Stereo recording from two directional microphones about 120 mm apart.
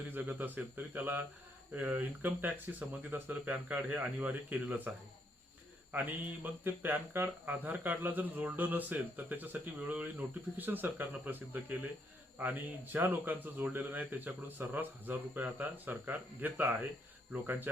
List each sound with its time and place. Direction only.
0.1 s speech: 15° right (ahead or behind)